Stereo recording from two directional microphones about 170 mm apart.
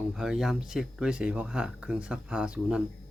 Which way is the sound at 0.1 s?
Centre (ahead or behind).